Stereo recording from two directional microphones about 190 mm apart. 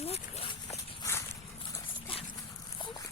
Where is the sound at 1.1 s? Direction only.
15° left (ahead or behind).